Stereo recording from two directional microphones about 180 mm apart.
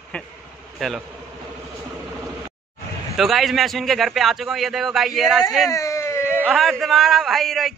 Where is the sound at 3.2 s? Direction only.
Centre (ahead or behind).